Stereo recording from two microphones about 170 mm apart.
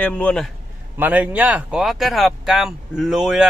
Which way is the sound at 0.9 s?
10° right (ahead or behind).